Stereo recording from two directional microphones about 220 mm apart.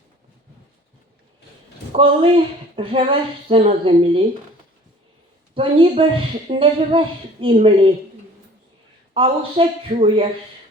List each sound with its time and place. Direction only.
1.9 s speech: 25° right (ahead or behind)
5.5 s speech: 25° right (ahead or behind)
9.1 s speech: 25° right (ahead or behind)